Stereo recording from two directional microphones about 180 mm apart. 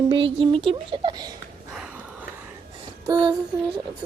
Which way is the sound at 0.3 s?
30° right (ahead or behind).